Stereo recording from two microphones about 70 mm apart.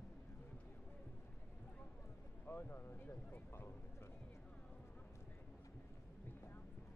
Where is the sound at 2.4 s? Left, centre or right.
Left.